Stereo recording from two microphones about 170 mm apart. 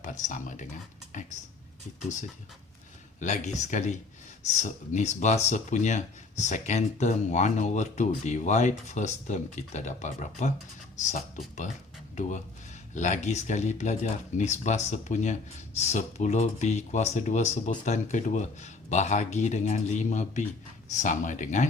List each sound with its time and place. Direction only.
0.0 s speech: 45° left (ahead or behind)
3.2 s speech: 45° left (ahead or behind)